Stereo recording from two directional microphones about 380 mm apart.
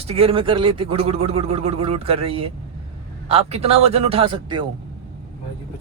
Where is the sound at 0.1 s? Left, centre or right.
Centre.